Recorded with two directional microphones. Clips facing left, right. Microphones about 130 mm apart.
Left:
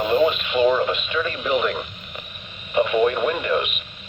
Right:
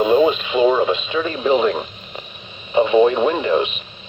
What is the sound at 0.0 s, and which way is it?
Speech, 20° right (ahead or behind).